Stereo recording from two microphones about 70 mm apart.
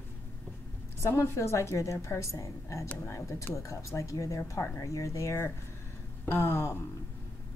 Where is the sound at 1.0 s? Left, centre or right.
Left.